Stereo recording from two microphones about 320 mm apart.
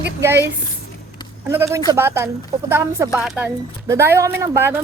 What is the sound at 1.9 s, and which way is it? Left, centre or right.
Speech, centre.